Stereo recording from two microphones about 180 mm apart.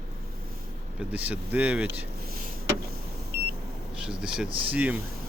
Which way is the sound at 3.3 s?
65° right (ahead or behind).